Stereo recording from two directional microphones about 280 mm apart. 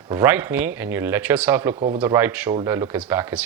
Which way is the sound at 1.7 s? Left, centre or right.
Right.